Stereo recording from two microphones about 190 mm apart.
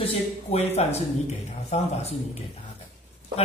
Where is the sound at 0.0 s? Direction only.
35° left (ahead or behind).